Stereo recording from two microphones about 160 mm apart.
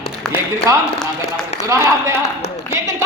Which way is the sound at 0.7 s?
20° right (ahead or behind).